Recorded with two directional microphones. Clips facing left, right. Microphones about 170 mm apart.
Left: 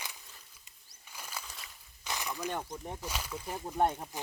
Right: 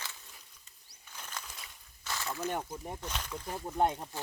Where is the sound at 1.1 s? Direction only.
10° left (ahead or behind).